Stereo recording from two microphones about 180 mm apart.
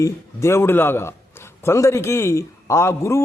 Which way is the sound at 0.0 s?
15° left (ahead or behind).